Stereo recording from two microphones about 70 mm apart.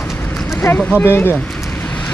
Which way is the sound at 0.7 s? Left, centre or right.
Left.